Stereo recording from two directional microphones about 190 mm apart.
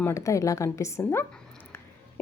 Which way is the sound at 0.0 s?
15° left (ahead or behind).